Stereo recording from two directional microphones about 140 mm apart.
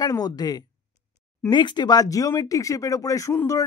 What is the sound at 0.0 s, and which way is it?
Speech, 25° left (ahead or behind).